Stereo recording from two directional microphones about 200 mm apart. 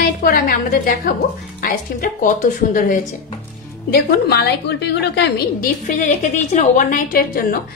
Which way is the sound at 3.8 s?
50° left (ahead or behind).